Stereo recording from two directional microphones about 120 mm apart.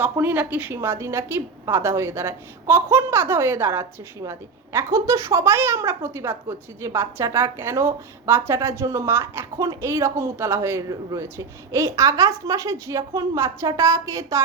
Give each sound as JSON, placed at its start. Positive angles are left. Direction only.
{"t": 0.0, "sound": "a woman's voice", "side_deg": -15}